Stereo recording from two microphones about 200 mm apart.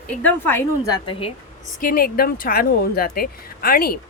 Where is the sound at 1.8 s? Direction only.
45° left (ahead or behind).